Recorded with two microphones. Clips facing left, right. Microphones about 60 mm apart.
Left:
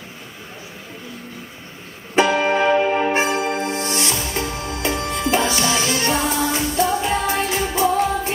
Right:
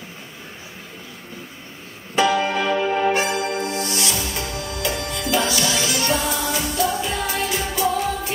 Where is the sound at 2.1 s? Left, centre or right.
Left.